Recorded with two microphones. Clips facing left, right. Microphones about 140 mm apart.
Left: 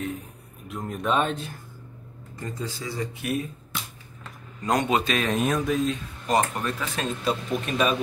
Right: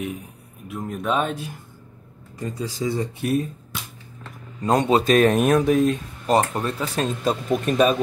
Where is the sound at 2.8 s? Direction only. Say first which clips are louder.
Right 9 dB; 25° right (ahead or behind).